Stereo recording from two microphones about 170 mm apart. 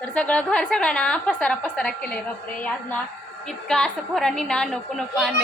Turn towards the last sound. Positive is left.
turn(degrees=0)  # may be behind; listen again after turning